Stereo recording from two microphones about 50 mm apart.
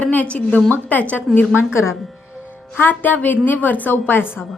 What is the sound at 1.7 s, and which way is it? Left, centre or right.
Speech, left.